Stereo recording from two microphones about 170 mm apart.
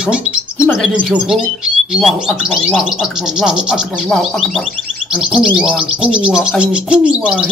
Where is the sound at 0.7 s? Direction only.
Centre (ahead or behind).